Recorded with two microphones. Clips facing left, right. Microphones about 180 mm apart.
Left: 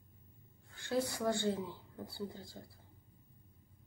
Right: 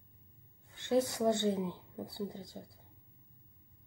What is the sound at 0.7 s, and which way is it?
Speech, 20° right (ahead or behind).